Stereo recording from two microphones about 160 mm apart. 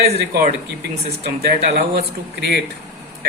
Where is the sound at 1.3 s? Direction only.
90° right.